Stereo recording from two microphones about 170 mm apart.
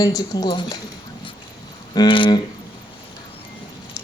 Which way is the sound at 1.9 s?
25° left (ahead or behind).